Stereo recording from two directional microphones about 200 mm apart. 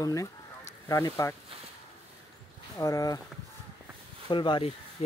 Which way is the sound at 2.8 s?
15° left (ahead or behind).